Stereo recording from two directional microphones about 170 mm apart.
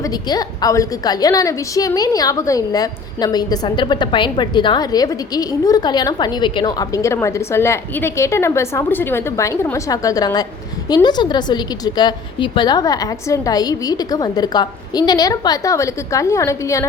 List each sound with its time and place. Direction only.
0.0 s a woman's voice: 25° left (ahead or behind)